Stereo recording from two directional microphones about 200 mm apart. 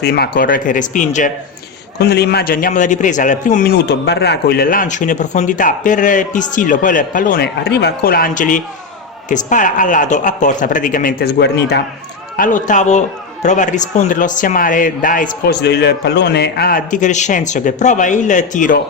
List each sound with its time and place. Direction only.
0.0 s a man's voice: 50° left (ahead or behind)
2.0 s a man's voice: 55° left (ahead or behind)
12.4 s a man's voice: 40° left (ahead or behind)
15.6 s a man's voice: 55° left (ahead or behind); by 18.8 s 40° left (ahead or behind)